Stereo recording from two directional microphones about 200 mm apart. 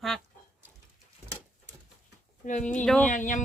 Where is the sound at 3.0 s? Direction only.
40° left (ahead or behind).